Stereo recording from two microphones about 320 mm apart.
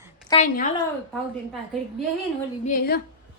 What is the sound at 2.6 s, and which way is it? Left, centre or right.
Speech, left.